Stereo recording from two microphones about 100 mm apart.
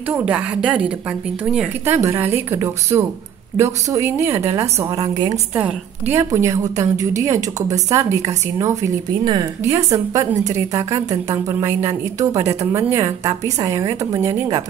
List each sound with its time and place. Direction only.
0.2 s a woman's voice: 10° right (ahead or behind)
1.9 s a woman's voice: 25° right (ahead or behind); by 5.4 s 40° right (ahead or behind)
5.5 s a woman's voice: 20° right (ahead or behind)
9.2 s speech: 45° right (ahead or behind)
9.6 s a woman's voice: 30° right (ahead or behind)